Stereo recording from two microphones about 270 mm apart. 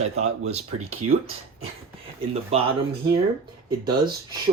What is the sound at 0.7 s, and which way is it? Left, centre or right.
Speech, right.